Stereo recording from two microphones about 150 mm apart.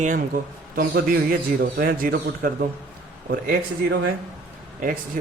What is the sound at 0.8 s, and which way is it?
A man's voice, 85° right.